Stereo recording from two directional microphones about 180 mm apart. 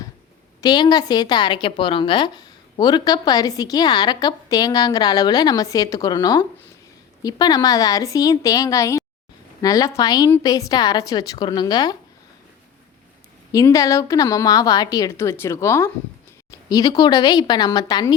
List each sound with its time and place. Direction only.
0.6 s a woman's voice: 20° left (ahead or behind)
13.5 s a woman's voice: 20° left (ahead or behind)
16.5 s a sound: 20° left (ahead or behind)
17.0 s a woman's voice: 20° left (ahead or behind)